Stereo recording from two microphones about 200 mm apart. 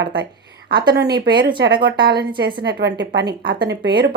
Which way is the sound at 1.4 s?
50° right (ahead or behind).